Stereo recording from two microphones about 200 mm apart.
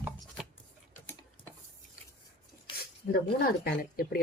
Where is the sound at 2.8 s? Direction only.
50° left (ahead or behind).